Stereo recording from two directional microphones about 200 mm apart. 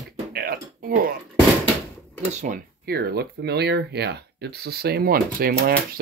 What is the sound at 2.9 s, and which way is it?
Speech, 50° right (ahead or behind).